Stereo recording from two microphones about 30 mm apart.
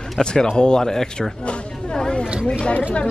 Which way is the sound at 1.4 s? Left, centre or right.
Left.